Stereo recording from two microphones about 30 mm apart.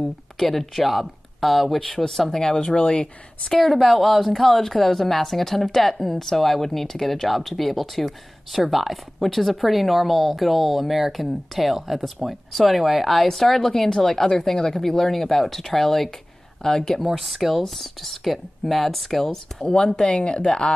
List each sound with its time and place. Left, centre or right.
0.5 s speech: centre; by 3.1 s left
3.8 s a woman's voice: centre
17.2 s a woman's voice: centre
19.6 s speech: left